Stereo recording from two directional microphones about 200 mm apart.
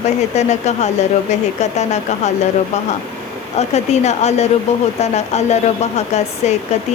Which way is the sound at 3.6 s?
35° left (ahead or behind).